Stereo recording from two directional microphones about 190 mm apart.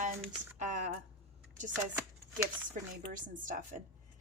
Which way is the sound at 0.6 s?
40° right (ahead or behind).